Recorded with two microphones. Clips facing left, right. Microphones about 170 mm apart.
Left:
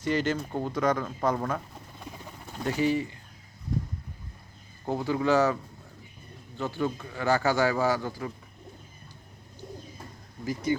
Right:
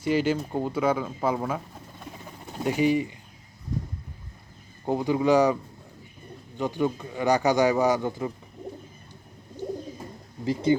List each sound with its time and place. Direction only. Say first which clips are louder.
0.0 s speech: right 3 dB; 10° right (ahead or behind)
4.9 s speech: right 4 dB; 15° right (ahead or behind)
6.6 s speech: right 4 dB; 15° right (ahead or behind)
10.4 s speech: right 5 dB; 25° right (ahead or behind)